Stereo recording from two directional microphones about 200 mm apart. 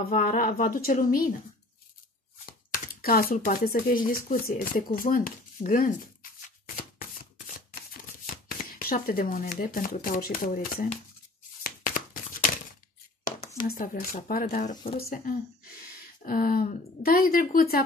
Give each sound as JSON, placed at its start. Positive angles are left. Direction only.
{"t": 0.1, "sound": "speech", "side_deg": 45}
{"t": 2.7, "sound": "speech", "side_deg": 45}
{"t": 6.6, "sound": "shuffling cards", "side_deg": 45}
{"t": 11.6, "sound": "a sound", "side_deg": 45}
{"t": 13.4, "sound": "a sound", "side_deg": 15}
{"t": 13.7, "sound": "speech", "side_deg": 45}